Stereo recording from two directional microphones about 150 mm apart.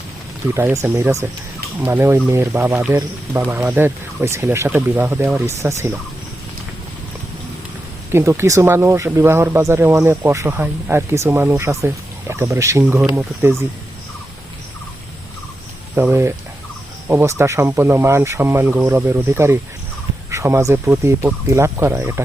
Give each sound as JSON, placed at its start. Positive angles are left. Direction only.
{"t": 0.5, "sound": "speech", "side_deg": -20}
{"t": 8.1, "sound": "speech", "side_deg": -15}
{"t": 16.0, "sound": "speech", "side_deg": -15}